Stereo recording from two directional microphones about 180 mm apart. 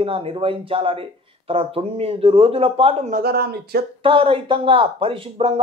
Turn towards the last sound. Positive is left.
turn(degrees=-30)  # may be behind; listen again after turning